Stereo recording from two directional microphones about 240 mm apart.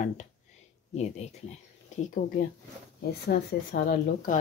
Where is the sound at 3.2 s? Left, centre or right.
Left.